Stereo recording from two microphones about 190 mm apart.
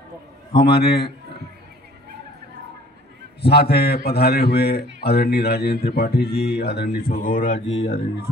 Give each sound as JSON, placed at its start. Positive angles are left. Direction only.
{"t": 0.7, "sound": "speech", "side_deg": 55}
{"t": 3.4, "sound": "speech", "side_deg": 60}